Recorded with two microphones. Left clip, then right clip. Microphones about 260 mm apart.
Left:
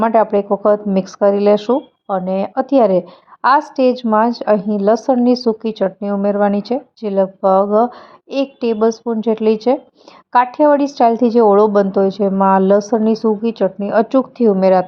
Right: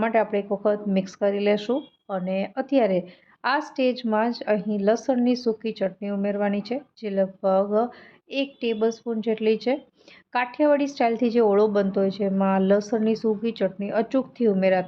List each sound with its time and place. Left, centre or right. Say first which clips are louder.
0.0 s a woman's voice: left 9 dB; centre